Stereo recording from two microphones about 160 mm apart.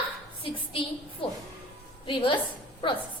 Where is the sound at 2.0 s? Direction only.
30° left (ahead or behind).